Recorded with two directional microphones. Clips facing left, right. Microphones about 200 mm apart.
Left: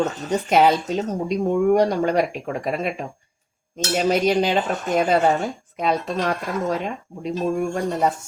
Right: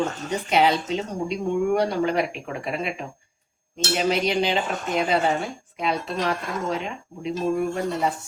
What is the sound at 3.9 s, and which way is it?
Speech, 45° left (ahead or behind).